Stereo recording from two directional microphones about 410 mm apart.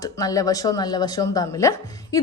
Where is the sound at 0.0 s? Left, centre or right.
Centre.